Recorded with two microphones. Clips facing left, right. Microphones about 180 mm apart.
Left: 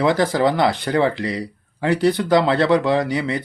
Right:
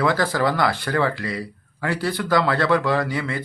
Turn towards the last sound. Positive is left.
turn(degrees=20)  # may be behind; listen again after turning